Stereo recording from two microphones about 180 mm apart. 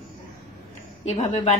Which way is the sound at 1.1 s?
35° left (ahead or behind).